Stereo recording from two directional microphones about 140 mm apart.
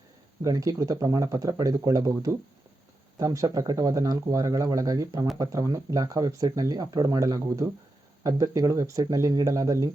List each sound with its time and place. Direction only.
0.4 s speech: 25° right (ahead or behind)